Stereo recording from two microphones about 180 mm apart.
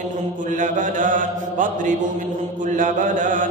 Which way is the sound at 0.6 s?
45° right (ahead or behind).